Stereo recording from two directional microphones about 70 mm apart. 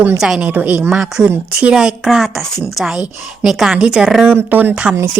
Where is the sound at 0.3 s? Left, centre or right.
Right.